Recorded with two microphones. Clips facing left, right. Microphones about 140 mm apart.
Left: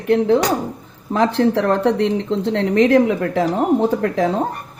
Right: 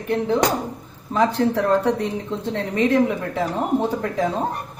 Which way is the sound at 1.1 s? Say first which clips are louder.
Left 3 dB; 65° left (ahead or behind).